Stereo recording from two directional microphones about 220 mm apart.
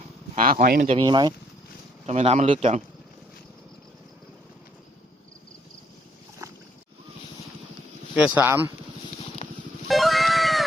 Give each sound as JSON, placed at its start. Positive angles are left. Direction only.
{"t": 0.3, "sound": "speech", "side_deg": -40}
{"t": 0.9, "sound": "speech", "side_deg": -20}
{"t": 8.1, "sound": "speech", "side_deg": -5}
{"t": 9.4, "sound": "a sound", "side_deg": 30}
{"t": 9.9, "sound": "cat", "side_deg": 0}